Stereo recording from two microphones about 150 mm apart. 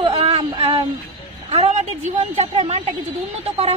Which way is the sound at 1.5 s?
45° right (ahead or behind).